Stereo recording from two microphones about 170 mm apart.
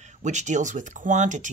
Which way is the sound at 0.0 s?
45° right (ahead or behind).